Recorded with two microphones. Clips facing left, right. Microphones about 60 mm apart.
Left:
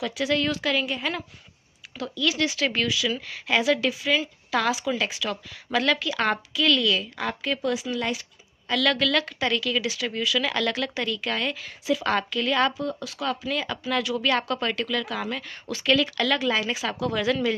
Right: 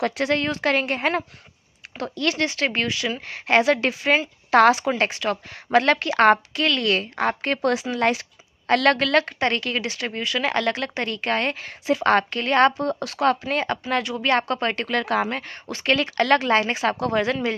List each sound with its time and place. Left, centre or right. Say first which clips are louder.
0.0 s a woman's voice: right 3 dB; right
8.0 s a sound: right 7 dB; right
8.7 s a woman's voice: right 5 dB; right
14.9 s a woman's voice: right 6 dB; right
16.3 s a woman's voice: right 5 dB; right